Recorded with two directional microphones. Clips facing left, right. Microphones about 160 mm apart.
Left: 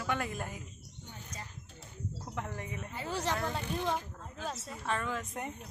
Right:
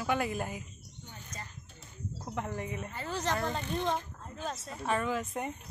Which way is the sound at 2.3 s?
5° right (ahead or behind).